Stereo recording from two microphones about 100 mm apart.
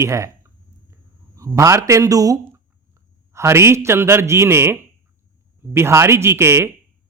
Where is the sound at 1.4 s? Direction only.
30° right (ahead or behind).